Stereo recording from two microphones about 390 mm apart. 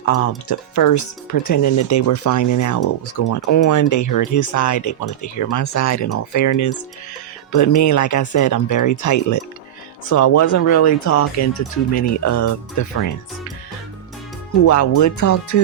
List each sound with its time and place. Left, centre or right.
0.0 s speech: left
14.6 s speech: left